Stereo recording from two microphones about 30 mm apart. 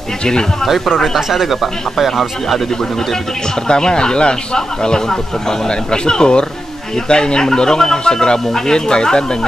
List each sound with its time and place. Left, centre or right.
0.2 s speech: left
0.9 s speech: centre
1.3 s speech: centre
3.6 s speech: left